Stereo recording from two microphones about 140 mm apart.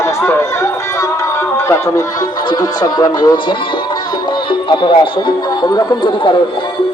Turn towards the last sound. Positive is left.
turn(degrees=35)  # may be behind; listen again after turning